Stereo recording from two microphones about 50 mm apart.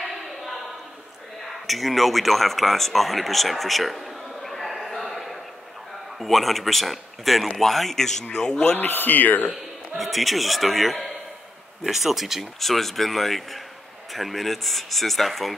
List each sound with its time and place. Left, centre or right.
0.0 s a sound: centre
1.5 s speech: centre
8.7 s a man's voice: left
9.9 s speech: centre